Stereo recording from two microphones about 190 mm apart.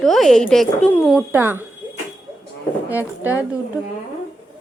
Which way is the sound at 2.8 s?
10° right (ahead or behind).